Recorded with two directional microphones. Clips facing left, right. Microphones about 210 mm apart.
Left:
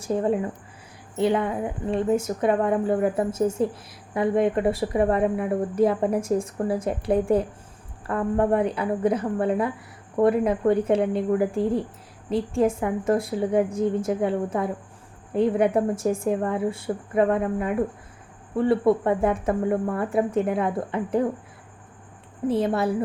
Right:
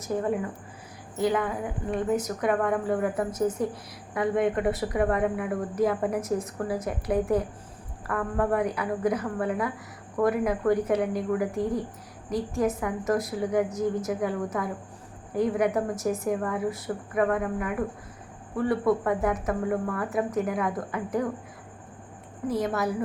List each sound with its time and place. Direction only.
0.0 s a woman's voice: 25° left (ahead or behind)
22.4 s a woman's voice: 30° left (ahead or behind)